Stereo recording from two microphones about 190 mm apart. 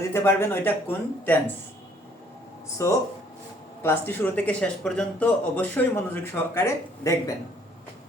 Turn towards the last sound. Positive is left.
turn(degrees=15)  # may be behind; listen again after turning